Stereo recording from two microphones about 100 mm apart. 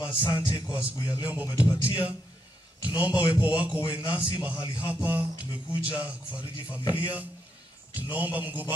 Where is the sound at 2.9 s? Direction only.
10° right (ahead or behind).